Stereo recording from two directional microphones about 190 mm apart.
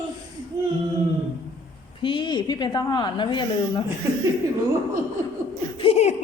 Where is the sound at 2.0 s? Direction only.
25° left (ahead or behind).